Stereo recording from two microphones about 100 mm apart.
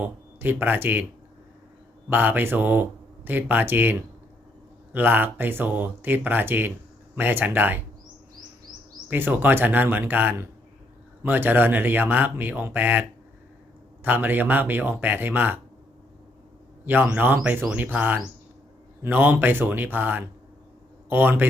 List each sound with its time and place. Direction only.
0.0 s speech: 20° right (ahead or behind)
2.0 s speech: 20° right (ahead or behind)
9.0 s speech: 20° right (ahead or behind)
16.8 s speech: 20° right (ahead or behind)